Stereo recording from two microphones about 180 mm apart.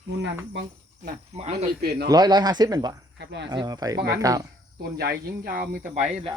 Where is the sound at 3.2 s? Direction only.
75° right (ahead or behind).